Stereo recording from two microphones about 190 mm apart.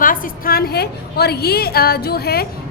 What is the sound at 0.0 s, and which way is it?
A woman's voice, 45° left (ahead or behind).